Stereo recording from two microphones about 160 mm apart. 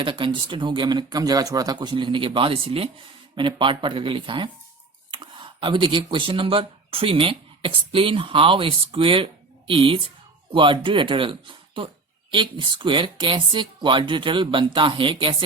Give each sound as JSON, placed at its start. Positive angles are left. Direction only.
{"t": 0.0, "sound": "speech", "side_deg": -30}